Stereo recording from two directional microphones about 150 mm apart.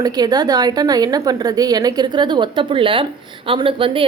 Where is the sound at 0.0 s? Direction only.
25° right (ahead or behind).